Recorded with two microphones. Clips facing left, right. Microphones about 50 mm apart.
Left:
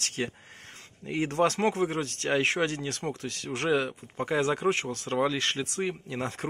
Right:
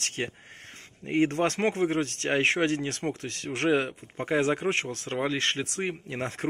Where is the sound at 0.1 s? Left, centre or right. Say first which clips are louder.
Even; right.